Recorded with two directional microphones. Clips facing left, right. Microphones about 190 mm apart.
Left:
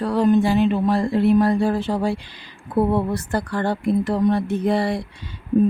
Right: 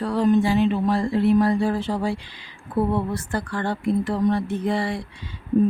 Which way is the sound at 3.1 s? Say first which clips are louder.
Left 3 dB; 40° left (ahead or behind).